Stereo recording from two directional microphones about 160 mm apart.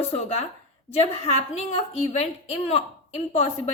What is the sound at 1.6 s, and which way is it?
Speech, 40° left (ahead or behind).